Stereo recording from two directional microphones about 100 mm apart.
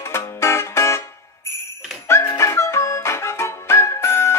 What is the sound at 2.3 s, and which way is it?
Music, 30° left (ahead or behind).